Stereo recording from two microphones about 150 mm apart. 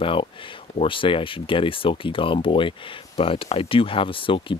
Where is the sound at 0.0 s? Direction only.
35° left (ahead or behind).